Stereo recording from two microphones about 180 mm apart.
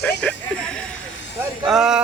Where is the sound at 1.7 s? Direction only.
Centre (ahead or behind).